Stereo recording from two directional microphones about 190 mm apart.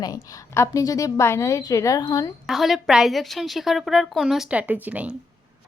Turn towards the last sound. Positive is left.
turn(degrees=-10)  # may be behind; listen again after turning